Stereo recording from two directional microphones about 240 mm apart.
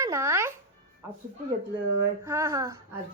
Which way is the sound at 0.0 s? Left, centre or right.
Centre.